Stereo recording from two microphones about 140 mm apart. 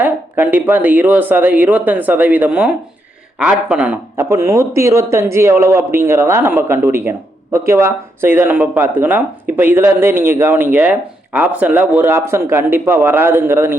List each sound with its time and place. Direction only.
0.0 s a man's voice: 15° right (ahead or behind)
4.3 s a man's voice: 20° right (ahead or behind)